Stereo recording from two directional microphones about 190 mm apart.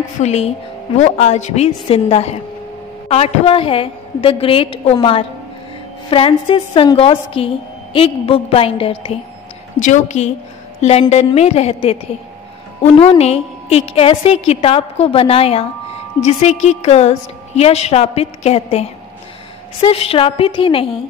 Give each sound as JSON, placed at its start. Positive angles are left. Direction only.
{"t": 0.2, "sound": "a woman's voice", "side_deg": 35}